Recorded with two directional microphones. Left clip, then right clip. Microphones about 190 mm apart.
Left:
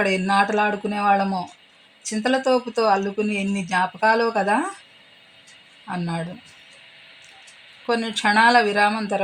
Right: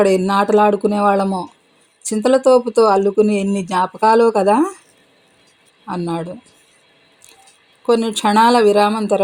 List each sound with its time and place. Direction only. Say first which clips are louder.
0.0 s speech: right 5 dB; 50° right (ahead or behind)
5.9 s speech: right 6 dB; 45° right (ahead or behind)
7.9 s speech: right 5 dB; 45° right (ahead or behind)